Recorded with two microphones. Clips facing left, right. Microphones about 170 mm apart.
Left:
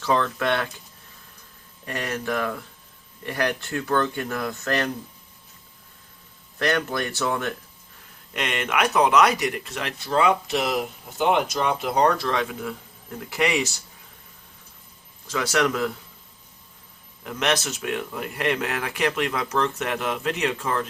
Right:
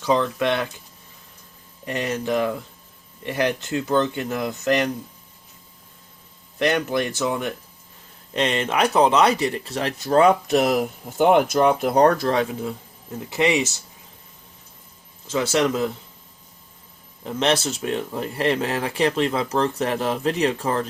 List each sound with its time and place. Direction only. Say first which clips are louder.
0.0 s speech: right 3 dB; 15° right (ahead or behind)
1.8 s speech: right 4 dB; 20° right (ahead or behind)
6.6 s speech: right 3 dB; 20° right (ahead or behind)
8.3 s speech: right 5 dB; 30° right (ahead or behind)
15.3 s speech: right 3 dB; 25° right (ahead or behind)
17.2 s speech: right 3 dB; 30° right (ahead or behind)